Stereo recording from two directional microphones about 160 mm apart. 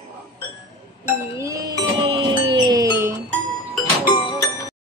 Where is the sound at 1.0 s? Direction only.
15° right (ahead or behind).